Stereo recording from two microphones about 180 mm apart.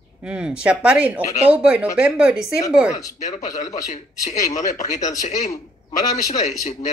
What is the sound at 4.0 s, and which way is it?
Speech, 40° left (ahead or behind).